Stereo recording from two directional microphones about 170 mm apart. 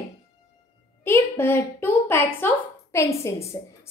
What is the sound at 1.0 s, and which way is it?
A woman's voice, 15° left (ahead or behind).